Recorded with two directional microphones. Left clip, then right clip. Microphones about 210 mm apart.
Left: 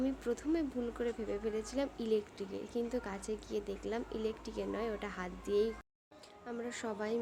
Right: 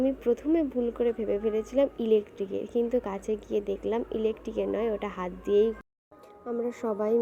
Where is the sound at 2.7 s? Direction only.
Centre (ahead or behind).